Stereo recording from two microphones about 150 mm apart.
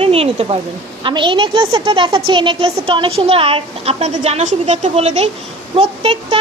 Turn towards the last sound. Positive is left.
turn(degrees=-40)  # may be behind; listen again after turning